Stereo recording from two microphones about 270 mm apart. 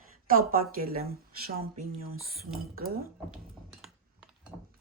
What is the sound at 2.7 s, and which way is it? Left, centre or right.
Speech, right.